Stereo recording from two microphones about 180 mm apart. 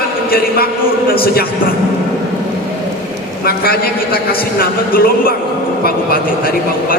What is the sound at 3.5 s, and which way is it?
A man's voice, 55° left (ahead or behind).